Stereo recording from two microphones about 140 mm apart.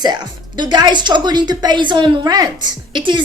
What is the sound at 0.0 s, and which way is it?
A woman's voice, 30° right (ahead or behind).